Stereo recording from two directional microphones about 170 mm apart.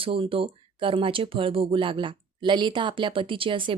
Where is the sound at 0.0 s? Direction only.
30° right (ahead or behind).